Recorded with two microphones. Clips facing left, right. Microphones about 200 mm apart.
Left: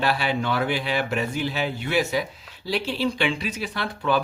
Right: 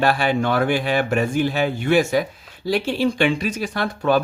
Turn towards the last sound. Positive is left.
turn(degrees=-45)  # may be behind; listen again after turning